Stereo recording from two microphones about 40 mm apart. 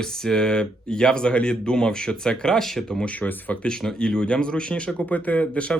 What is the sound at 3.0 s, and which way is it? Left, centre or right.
Speech, left.